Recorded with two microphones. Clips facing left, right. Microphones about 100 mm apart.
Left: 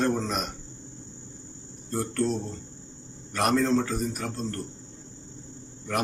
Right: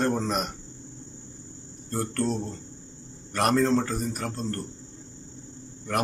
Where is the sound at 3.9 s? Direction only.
Centre (ahead or behind).